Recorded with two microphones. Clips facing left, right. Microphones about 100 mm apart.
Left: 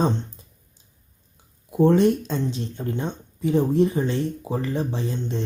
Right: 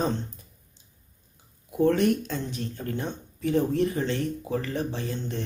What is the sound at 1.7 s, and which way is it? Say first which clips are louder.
Speech: left 4 dB; 25° left (ahead or behind).